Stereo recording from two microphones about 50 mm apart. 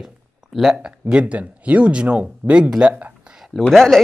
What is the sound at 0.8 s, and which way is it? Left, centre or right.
Speech, right.